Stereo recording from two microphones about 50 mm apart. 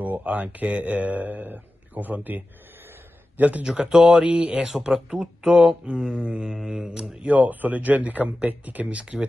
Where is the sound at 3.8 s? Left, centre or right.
Centre.